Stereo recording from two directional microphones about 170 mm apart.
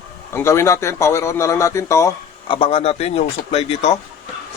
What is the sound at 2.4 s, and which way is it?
Speech, 35° left (ahead or behind).